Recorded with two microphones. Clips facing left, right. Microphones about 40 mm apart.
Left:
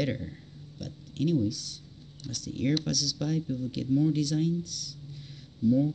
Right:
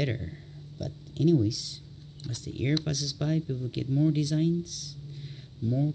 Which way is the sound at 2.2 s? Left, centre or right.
Right.